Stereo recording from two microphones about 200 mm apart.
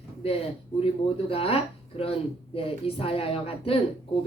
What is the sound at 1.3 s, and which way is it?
A woman's voice, 30° left (ahead or behind).